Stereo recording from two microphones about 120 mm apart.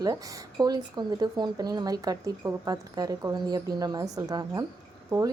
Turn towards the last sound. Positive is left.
turn(degrees=-35)  # may be behind; listen again after turning